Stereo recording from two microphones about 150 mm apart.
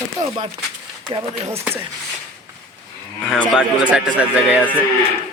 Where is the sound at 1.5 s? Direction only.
15° right (ahead or behind).